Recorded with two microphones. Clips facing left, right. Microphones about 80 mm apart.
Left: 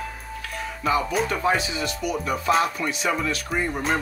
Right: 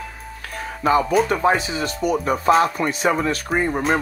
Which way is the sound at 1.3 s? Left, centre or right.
Right.